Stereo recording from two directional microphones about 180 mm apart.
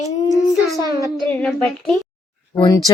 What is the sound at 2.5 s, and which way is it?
Speech, 25° left (ahead or behind).